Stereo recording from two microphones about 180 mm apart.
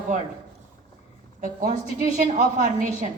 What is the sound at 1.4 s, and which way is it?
A woman's voice, 45° right (ahead or behind).